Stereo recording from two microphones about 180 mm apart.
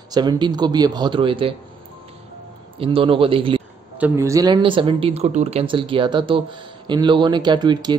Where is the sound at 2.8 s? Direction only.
30° right (ahead or behind).